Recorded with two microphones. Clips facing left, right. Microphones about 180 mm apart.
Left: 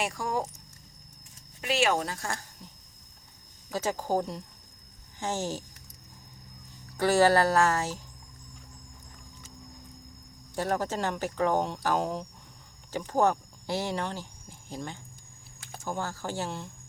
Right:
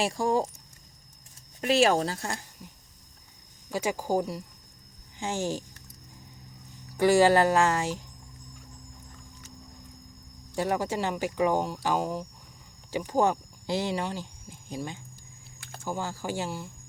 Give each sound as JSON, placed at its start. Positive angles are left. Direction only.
{"t": 0.0, "sound": "speech", "side_deg": -30}
{"t": 1.6, "sound": "speech", "side_deg": -35}
{"t": 3.7, "sound": "speech", "side_deg": -15}
{"t": 6.9, "sound": "speech", "side_deg": -15}
{"t": 10.5, "sound": "speech", "side_deg": -15}
{"t": 12.9, "sound": "speech", "side_deg": -15}